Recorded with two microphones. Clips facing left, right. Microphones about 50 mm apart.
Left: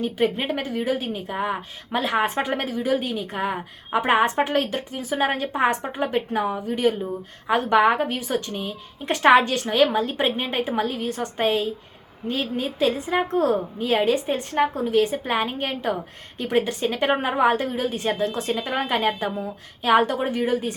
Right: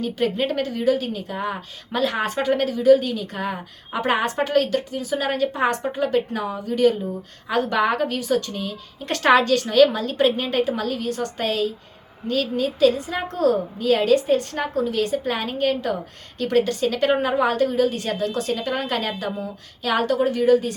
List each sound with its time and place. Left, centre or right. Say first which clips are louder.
0.0 s a woman's voice: even; left